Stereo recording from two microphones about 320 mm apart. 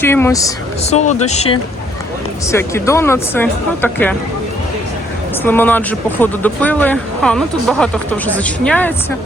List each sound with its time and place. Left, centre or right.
0.0 s speech: centre
2.5 s speech: centre
5.4 s speech: centre